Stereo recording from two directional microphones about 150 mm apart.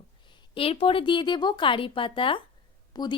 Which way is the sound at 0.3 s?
35° left (ahead or behind).